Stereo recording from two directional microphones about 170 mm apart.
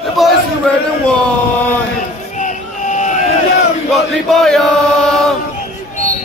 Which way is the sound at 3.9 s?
Centre (ahead or behind).